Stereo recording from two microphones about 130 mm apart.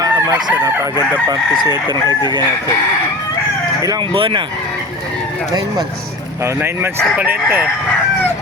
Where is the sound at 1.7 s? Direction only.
30° left (ahead or behind).